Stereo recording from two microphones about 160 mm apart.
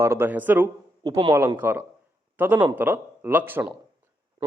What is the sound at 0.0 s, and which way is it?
Speech, 15° right (ahead or behind).